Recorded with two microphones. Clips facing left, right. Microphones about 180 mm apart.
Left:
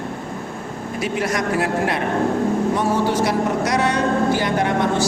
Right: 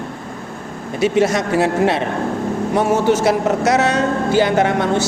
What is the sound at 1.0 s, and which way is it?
Speech, 25° right (ahead or behind).